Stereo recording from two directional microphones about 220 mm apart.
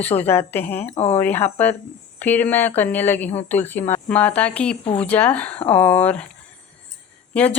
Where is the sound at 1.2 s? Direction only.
10° left (ahead or behind).